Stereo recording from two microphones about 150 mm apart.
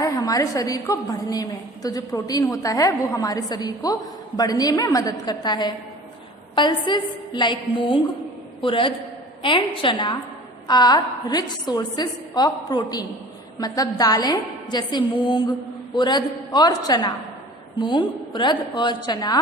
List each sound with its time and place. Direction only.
0.0 s a woman's voice: 25° left (ahead or behind)